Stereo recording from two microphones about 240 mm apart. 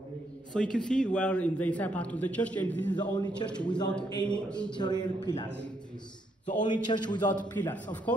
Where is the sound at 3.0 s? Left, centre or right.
Centre.